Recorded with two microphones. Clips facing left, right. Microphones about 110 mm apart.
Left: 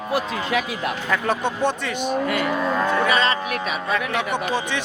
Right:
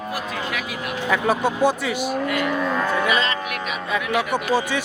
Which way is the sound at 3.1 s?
35° left (ahead or behind).